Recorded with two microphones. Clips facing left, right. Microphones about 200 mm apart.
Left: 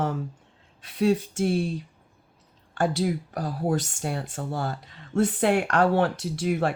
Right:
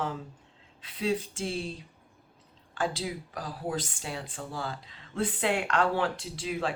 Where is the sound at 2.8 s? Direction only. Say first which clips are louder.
Left 7 dB; 65° left (ahead or behind).